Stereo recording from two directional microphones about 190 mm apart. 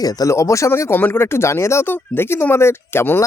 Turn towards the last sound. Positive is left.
turn(degrees=10)  # may be behind; listen again after turning